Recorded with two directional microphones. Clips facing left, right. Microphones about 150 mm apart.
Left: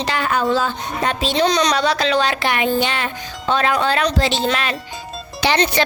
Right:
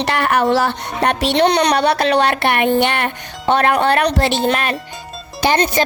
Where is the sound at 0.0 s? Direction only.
65° right (ahead or behind).